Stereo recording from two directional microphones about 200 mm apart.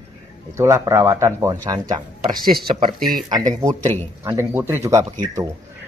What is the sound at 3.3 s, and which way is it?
A man's voice, 20° right (ahead or behind).